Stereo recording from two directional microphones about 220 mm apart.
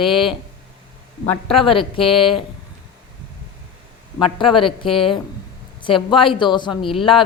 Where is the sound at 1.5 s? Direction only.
25° left (ahead or behind).